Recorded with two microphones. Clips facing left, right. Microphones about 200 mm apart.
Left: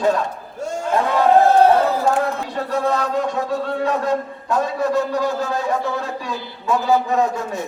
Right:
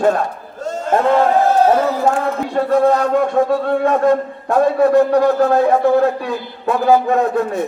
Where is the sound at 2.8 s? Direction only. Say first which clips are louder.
Right 4 dB; 55° right (ahead or behind).